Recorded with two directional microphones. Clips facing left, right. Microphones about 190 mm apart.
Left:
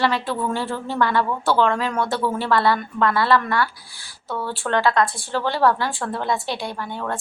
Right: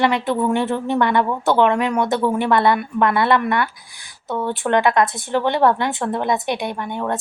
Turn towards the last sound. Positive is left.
turn(degrees=-20)  # may be behind; listen again after turning